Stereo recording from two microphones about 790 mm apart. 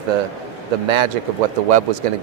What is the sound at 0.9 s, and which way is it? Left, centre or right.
Speech, right.